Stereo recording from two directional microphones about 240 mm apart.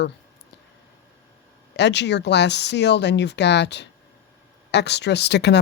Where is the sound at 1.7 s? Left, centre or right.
Left.